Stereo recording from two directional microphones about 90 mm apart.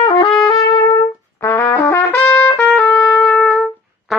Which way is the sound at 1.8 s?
30° left (ahead or behind).